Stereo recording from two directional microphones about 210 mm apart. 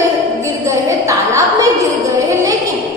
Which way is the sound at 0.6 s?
15° right (ahead or behind).